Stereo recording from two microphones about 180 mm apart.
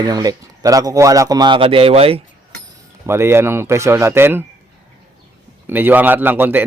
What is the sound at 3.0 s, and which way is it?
A man's voice, 15° right (ahead or behind).